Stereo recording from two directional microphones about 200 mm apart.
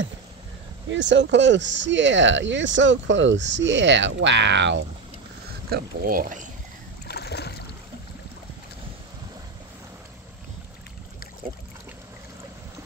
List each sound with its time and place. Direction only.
0.8 s speech: 65° right (ahead or behind)
5.7 s speech: 50° right (ahead or behind)
7.1 s boat: 55° left (ahead or behind)